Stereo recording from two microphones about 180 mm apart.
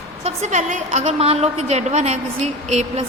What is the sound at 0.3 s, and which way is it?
A woman's voice, 40° right (ahead or behind).